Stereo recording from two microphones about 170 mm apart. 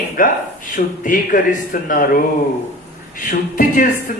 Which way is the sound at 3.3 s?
55° left (ahead or behind).